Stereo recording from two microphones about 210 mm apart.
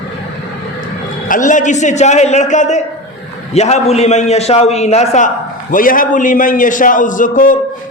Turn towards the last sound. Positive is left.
turn(degrees=40)  # may be behind; listen again after turning